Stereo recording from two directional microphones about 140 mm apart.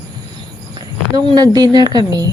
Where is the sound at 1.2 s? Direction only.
30° right (ahead or behind).